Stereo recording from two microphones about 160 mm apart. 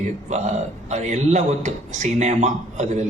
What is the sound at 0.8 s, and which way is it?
A man's voice, 45° right (ahead or behind).